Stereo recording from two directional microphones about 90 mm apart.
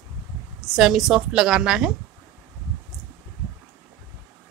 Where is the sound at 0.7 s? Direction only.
5° right (ahead or behind).